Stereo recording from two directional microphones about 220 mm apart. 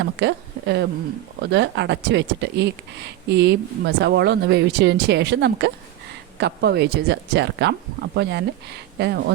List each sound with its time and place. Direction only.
0.0 s speech: 50° right (ahead or behind)